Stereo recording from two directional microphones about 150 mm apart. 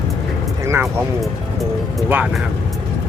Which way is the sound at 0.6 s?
20° right (ahead or behind).